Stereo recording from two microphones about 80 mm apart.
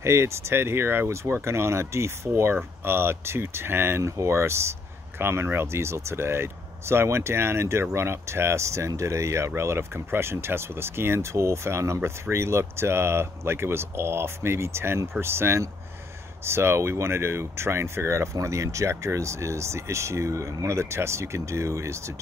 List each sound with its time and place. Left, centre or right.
0.0 s speech: right